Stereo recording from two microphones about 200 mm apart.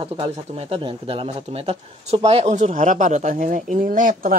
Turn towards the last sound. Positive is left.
turn(degrees=-45)  # may be behind; listen again after turning